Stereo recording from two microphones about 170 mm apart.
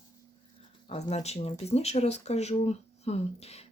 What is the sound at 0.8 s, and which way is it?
Speech, 40° left (ahead or behind).